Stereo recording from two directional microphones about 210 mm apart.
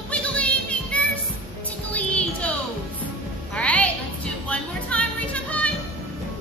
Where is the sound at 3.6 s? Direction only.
5° left (ahead or behind).